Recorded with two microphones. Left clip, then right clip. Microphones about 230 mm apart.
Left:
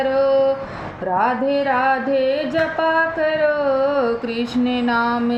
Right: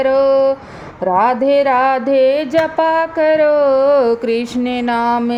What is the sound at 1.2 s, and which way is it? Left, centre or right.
Music, right.